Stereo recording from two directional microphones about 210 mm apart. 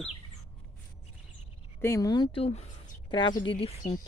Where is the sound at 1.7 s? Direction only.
10° left (ahead or behind).